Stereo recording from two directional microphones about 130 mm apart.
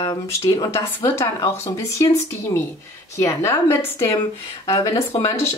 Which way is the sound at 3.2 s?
20° left (ahead or behind).